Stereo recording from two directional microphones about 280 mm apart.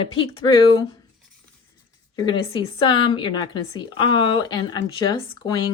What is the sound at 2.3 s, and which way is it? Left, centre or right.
A woman's voice, centre.